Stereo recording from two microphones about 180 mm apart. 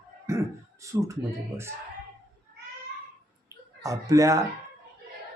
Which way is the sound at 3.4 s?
20° right (ahead or behind).